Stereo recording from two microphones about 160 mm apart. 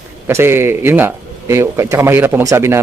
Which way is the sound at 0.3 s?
15° right (ahead or behind).